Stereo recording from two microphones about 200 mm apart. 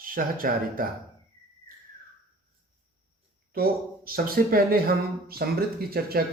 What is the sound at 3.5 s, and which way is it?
Speech, 50° right (ahead or behind).